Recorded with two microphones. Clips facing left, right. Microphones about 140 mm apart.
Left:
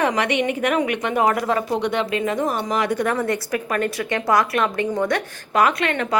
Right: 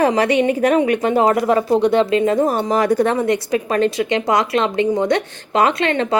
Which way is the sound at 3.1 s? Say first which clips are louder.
Right 5 dB; 20° right (ahead or behind).